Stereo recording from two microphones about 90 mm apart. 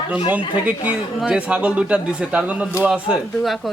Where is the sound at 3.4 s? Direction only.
Centre (ahead or behind).